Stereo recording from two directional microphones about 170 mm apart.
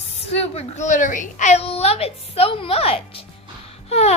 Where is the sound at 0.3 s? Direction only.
35° left (ahead or behind).